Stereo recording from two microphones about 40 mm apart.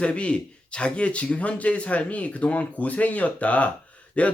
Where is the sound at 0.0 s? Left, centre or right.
Left.